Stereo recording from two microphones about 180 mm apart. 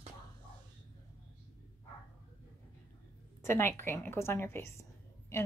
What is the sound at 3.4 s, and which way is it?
A woman's voice, 15° left (ahead or behind).